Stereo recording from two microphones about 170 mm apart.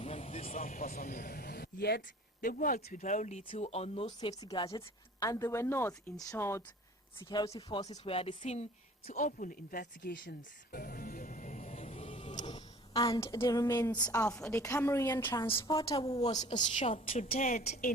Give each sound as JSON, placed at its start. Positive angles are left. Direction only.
{"t": 0.0, "sound": "a sound", "side_deg": 40}
{"t": 2.4, "sound": "a woman's voice", "side_deg": 55}
{"t": 4.4, "sound": "a woman's voice", "side_deg": 20}
{"t": 7.2, "sound": "speech", "side_deg": 25}
{"t": 7.9, "sound": "a woman's voice", "side_deg": 35}
{"t": 9.0, "sound": "speech", "side_deg": 50}
{"t": 12.3, "sound": "a sound", "side_deg": 25}
{"t": 13.2, "sound": "a woman's voice", "side_deg": 20}
{"t": 16.0, "sound": "a woman's voice", "side_deg": 35}